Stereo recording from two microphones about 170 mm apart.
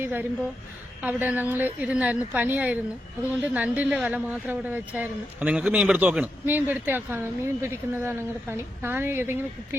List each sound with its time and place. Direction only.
0.0 s a woman's voice: 10° right (ahead or behind)